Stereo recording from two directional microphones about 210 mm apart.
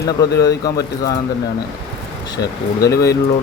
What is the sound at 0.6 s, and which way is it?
Speech, 20° left (ahead or behind).